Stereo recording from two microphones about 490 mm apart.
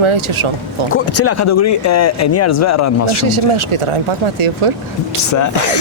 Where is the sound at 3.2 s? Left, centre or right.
Right.